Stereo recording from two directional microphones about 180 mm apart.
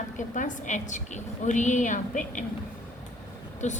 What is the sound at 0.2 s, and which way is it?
A woman's voice, 45° left (ahead or behind).